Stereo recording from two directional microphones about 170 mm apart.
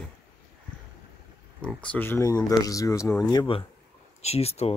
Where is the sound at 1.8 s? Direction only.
10° left (ahead or behind).